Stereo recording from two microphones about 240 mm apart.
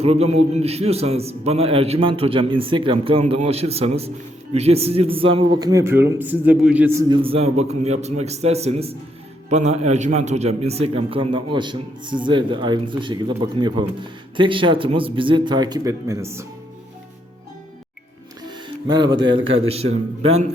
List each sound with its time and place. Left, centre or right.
0.0 s a man's voice: right
18.5 s music: centre
19.5 s a man's voice: right